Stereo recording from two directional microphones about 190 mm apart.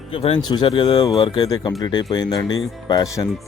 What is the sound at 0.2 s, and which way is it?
Speech, 25° left (ahead or behind).